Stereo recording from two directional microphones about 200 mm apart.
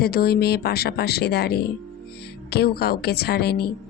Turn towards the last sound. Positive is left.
turn(degrees=50)  # may be behind; listen again after turning